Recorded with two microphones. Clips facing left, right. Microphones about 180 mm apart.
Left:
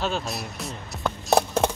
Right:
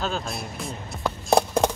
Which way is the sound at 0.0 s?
Centre (ahead or behind).